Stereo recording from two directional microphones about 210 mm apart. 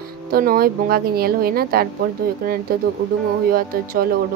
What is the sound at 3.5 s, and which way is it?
Speech, 45° right (ahead or behind).